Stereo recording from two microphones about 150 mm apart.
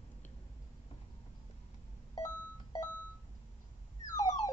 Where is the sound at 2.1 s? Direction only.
20° left (ahead or behind).